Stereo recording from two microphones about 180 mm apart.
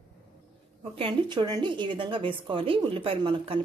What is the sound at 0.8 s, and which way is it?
A woman's voice, 30° right (ahead or behind).